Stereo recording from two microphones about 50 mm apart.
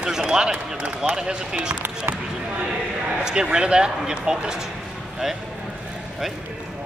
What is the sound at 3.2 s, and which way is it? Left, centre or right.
Speech, centre.